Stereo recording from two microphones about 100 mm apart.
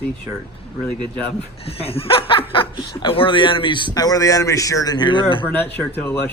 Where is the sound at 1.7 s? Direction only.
75° left (ahead or behind); by 3.9 s 55° left (ahead or behind).